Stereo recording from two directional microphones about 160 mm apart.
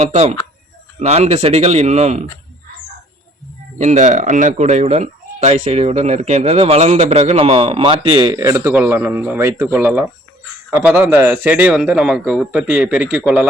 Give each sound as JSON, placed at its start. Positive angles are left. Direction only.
{"t": 0.0, "sound": "speech", "side_deg": -45}
{"t": 3.8, "sound": "a man's voice", "side_deg": -45}